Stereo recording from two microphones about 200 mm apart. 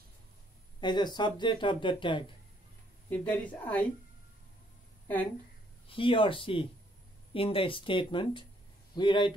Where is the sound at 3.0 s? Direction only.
5° left (ahead or behind).